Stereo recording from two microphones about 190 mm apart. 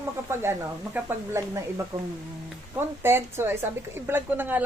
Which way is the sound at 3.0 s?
10° right (ahead or behind).